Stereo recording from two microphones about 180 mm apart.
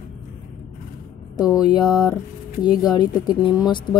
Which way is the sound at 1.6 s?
20° left (ahead or behind).